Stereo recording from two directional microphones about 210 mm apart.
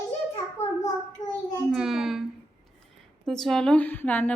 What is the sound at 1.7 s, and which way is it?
Speech, centre (ahead or behind).